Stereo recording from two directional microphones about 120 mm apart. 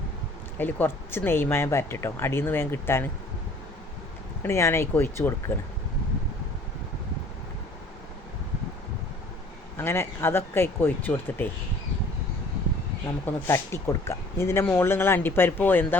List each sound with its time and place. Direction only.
0.6 s speech: 15° left (ahead or behind)
4.4 s speech: 20° left (ahead or behind)
9.7 s speech: 20° left (ahead or behind)
13.5 s speech: 25° left (ahead or behind)